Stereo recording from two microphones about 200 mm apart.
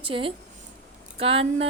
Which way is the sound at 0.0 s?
25° right (ahead or behind).